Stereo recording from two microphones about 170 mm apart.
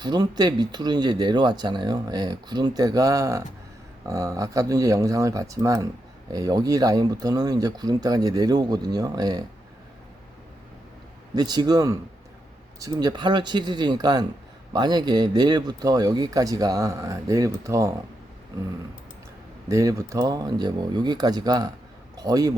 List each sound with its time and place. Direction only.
0.0 s speech: 25° right (ahead or behind)
11.3 s speech: 25° right (ahead or behind)
19.6 s a man's voice: 20° right (ahead or behind)